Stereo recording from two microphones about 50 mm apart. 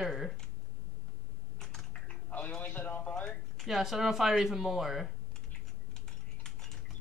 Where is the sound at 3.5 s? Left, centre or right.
Centre.